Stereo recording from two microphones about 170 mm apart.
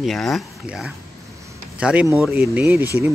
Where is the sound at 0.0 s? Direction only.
Centre (ahead or behind).